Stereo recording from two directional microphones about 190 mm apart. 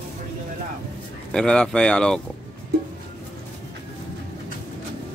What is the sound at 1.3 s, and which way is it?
Speech, 5° left (ahead or behind).